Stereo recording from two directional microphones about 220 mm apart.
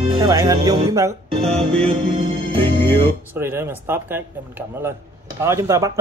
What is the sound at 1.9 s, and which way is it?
Music, 25° right (ahead or behind).